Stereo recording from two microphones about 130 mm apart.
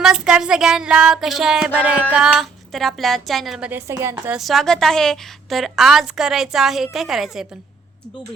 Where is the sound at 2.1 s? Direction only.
5° right (ahead or behind).